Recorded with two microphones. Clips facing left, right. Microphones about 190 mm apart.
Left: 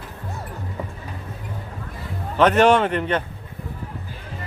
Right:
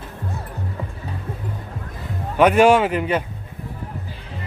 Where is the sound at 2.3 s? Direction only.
10° right (ahead or behind).